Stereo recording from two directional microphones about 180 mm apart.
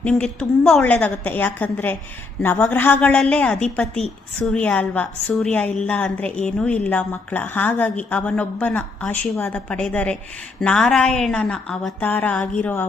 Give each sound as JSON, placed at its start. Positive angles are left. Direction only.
{"t": 0.0, "sound": "a woman's voice", "side_deg": 5}